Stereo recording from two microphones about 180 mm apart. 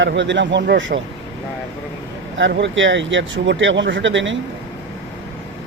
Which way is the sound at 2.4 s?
85° right.